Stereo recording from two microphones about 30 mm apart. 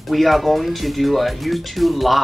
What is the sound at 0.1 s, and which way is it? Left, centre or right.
Speech, centre.